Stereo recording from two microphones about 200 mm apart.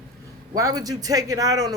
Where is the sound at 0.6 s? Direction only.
20° right (ahead or behind).